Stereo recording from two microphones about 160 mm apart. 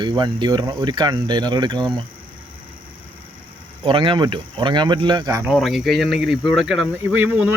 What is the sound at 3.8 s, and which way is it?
Speech, 30° right (ahead or behind).